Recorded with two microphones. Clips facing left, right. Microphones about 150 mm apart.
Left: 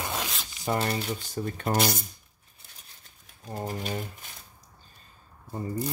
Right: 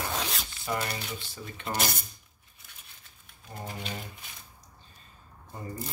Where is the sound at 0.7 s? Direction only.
30° left (ahead or behind).